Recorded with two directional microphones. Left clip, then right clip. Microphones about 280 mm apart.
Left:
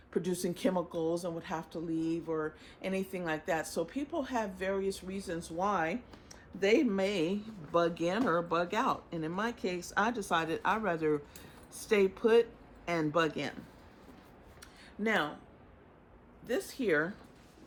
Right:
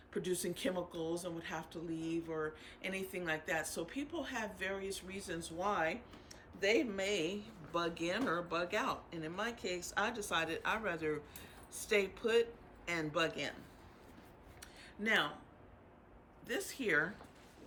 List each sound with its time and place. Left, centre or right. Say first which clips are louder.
0.1 s speech: left 5 dB; centre
15.0 s speech: left 2 dB; centre
16.5 s speech: left 5 dB; centre